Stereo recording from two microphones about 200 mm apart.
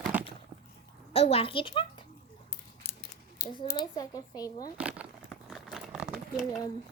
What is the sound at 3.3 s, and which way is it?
Speech, 25° left (ahead or behind).